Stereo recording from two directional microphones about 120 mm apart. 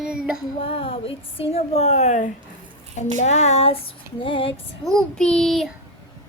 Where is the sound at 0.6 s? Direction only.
50° left (ahead or behind); by 2.3 s 75° left (ahead or behind).